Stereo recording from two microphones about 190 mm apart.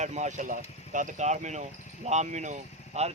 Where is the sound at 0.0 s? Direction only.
40° right (ahead or behind).